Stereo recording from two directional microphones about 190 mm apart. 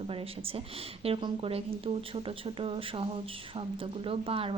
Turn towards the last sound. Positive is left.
turn(degrees=-30)  # may be behind; listen again after turning